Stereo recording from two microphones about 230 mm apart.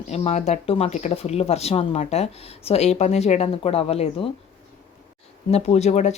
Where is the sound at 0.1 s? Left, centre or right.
Left.